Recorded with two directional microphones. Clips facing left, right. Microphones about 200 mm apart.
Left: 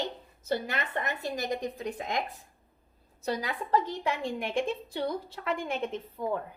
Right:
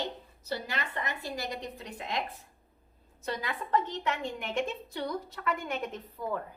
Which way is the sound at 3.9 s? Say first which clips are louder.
Left 2 dB; 10° left (ahead or behind).